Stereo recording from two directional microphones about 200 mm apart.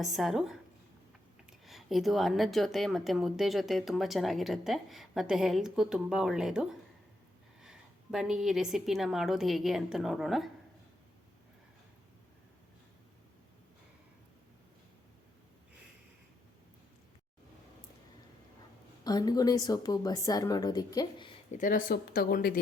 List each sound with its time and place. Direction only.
0.0 s a woman's voice: centre (ahead or behind)
19.0 s speech: 20° left (ahead or behind)
21.5 s speech: 40° left (ahead or behind)